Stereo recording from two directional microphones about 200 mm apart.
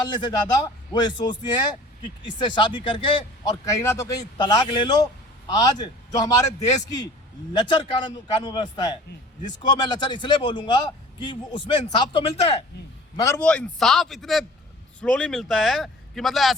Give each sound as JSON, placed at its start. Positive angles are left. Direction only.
{"t": 0.1, "sound": "speech", "side_deg": 20}
{"t": 13.2, "sound": "speech", "side_deg": 5}